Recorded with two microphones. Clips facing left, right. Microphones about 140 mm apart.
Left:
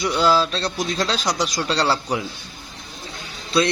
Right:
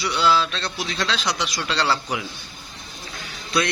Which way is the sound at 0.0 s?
40° left (ahead or behind).